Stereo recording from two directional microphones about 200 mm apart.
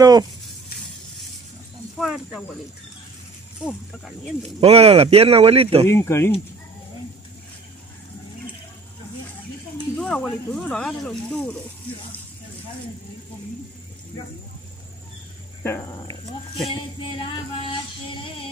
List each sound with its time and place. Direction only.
0.0 s speech: 20° right (ahead or behind)
2.0 s speech: centre (ahead or behind)
3.6 s speech: centre (ahead or behind)
4.6 s speech: 30° right (ahead or behind)
5.9 s speech: 15° left (ahead or behind)
9.9 s speech: 5° left (ahead or behind)
15.6 s speech: 15° left (ahead or behind)
16.6 s music: 25° left (ahead or behind)